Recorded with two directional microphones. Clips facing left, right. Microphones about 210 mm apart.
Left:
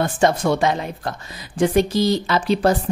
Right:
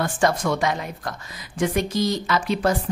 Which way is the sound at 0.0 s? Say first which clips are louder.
Left 3 dB; 25° left (ahead or behind).